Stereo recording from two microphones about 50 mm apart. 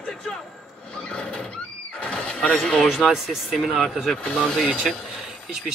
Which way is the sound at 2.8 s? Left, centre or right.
Centre.